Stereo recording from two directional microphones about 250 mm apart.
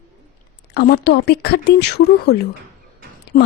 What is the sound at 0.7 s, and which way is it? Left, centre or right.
Speech, left.